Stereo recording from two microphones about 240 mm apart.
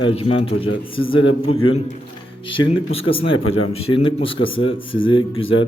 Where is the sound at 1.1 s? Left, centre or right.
Left.